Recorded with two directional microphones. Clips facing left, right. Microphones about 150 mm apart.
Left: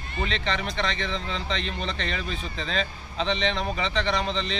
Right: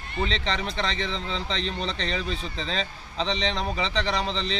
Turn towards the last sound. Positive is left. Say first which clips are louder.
# left 1 dB
turn(degrees=-35)  # may be behind; listen again after turning